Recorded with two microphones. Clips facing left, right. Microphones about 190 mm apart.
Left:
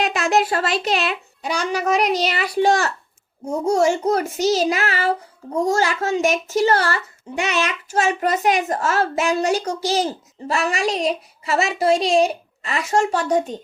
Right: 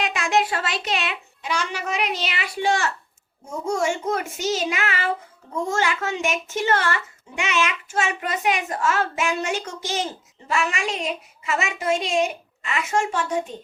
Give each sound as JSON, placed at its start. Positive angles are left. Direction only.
{"t": 0.0, "sound": "a child's voice", "side_deg": 40}